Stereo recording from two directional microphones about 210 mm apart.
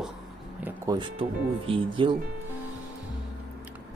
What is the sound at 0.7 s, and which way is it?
Speech, 20° right (ahead or behind).